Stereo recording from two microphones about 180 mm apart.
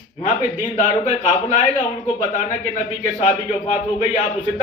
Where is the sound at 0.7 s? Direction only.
35° left (ahead or behind).